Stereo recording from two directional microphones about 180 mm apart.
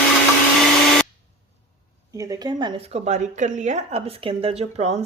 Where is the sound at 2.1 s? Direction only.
20° right (ahead or behind).